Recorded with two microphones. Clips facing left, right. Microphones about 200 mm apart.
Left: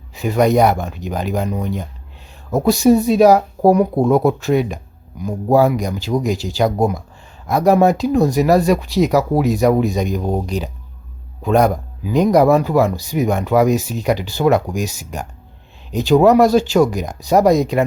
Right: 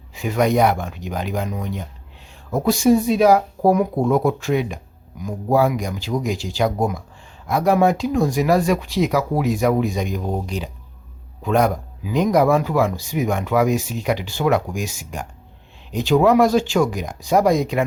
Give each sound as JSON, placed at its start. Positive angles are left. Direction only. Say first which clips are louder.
{"t": 0.1, "sound": "speech", "louder": "left 4 dB", "side_deg": 40}